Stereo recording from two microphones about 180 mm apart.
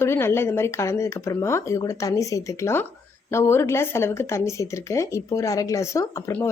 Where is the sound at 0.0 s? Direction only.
15° left (ahead or behind).